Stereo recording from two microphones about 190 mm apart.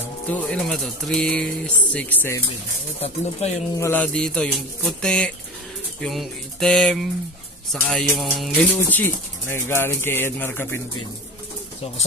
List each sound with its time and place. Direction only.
0.3 s speech: 5° left (ahead or behind)
3.0 s speech: 35° left (ahead or behind)
3.7 s speech: 10° left (ahead or behind)
8.9 s speech: 10° left (ahead or behind)